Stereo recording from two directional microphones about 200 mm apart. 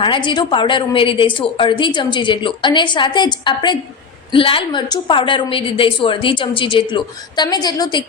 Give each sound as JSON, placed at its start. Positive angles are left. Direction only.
{"t": 0.0, "sound": "a woman's voice", "side_deg": 25}